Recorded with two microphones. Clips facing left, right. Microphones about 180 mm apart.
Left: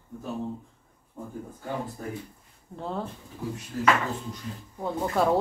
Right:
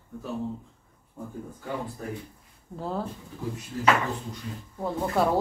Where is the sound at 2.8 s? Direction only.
5° right (ahead or behind).